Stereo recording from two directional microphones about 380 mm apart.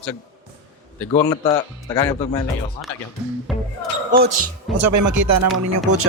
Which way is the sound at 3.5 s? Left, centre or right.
Centre.